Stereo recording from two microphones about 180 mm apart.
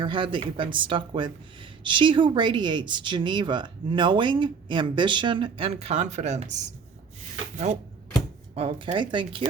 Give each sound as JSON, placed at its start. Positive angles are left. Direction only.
{"t": 0.0, "sound": "speech", "side_deg": -30}